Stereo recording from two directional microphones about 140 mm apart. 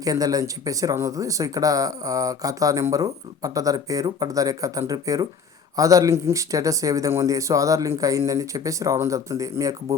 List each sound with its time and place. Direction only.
0.0 s speech: 25° right (ahead or behind)